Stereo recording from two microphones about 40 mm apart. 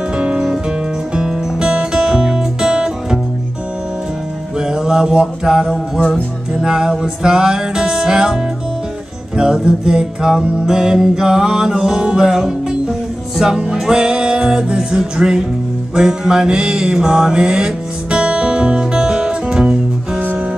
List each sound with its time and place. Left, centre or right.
1.1 s music: centre
4.6 s music: centre
9.4 s music: centre
15.9 s mantra: centre